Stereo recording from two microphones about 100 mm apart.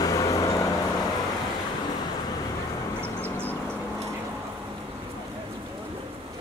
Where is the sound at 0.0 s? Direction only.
40° left (ahead or behind).